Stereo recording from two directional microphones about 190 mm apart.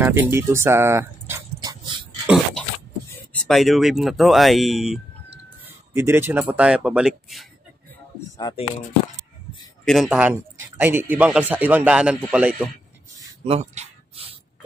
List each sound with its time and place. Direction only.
0.0 s dog: 10° right (ahead or behind)
2.2 s a sound: centre (ahead or behind)
3.4 s speech: centre (ahead or behind)
8.4 s speech: 20° left (ahead or behind)
9.8 s a man's voice: centre (ahead or behind)
13.5 s a sound: 35° right (ahead or behind)